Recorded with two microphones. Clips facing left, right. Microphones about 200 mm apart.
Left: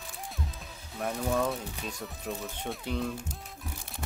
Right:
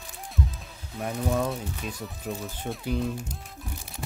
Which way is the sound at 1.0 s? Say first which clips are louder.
Right 2 dB; centre (ahead or behind).